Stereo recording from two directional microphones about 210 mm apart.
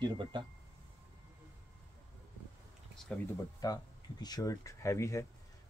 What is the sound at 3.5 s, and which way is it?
Speech, 15° left (ahead or behind).